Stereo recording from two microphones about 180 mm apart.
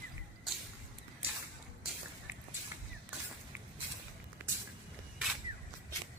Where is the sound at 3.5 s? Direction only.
10° right (ahead or behind).